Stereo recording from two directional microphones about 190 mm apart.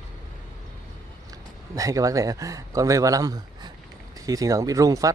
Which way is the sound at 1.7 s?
15° right (ahead or behind).